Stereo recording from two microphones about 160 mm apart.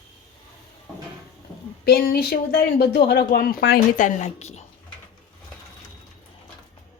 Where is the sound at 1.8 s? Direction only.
70° left (ahead or behind).